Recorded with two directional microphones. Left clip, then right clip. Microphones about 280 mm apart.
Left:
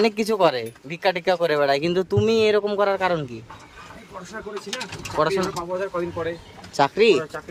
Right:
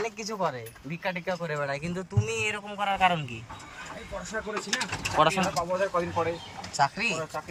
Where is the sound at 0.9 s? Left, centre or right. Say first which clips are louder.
Left 10 dB; left.